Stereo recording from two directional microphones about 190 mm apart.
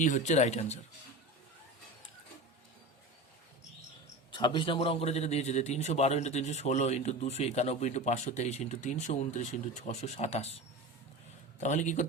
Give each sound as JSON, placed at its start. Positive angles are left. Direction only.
{"t": 0.0, "sound": "a man's voice", "side_deg": 40}
{"t": 4.3, "sound": "a man's voice", "side_deg": 25}
{"t": 11.6, "sound": "a man's voice", "side_deg": 40}